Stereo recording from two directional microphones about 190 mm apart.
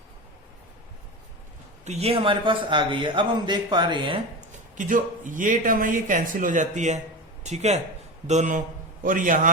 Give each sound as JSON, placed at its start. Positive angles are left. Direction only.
{"t": 1.8, "sound": "a man's voice", "side_deg": -35}
{"t": 4.4, "sound": "speech", "side_deg": -40}